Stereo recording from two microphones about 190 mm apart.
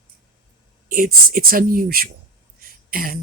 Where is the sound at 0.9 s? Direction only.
50° right (ahead or behind).